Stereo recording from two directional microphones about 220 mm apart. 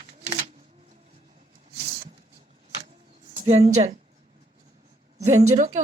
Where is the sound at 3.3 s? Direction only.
25° right (ahead or behind).